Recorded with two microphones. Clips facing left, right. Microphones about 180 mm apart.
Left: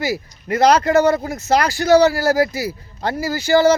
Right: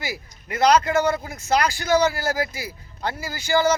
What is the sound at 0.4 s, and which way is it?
Speech, 40° left (ahead or behind).